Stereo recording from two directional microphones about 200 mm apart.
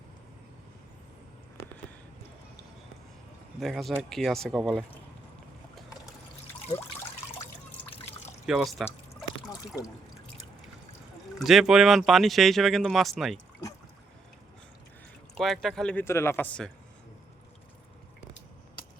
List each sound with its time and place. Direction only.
3.6 s speech: centre (ahead or behind)
7.9 s water: 30° left (ahead or behind)
8.4 s speech: centre (ahead or behind)
11.3 s speech: centre (ahead or behind)
15.4 s speech: centre (ahead or behind)